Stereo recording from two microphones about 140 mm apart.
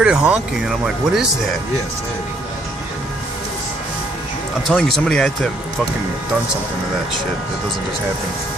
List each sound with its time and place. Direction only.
0.0 s speech: 10° right (ahead or behind)
4.6 s speech: 5° left (ahead or behind)